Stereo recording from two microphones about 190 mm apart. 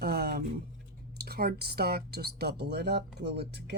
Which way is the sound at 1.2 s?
55° right (ahead or behind).